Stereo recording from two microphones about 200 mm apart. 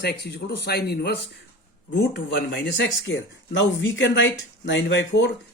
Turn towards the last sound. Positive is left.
turn(degrees=65)  # may be behind; listen again after turning